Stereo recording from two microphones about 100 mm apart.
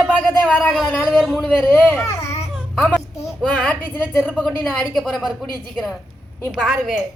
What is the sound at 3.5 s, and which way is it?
Speech, 10° left (ahead or behind).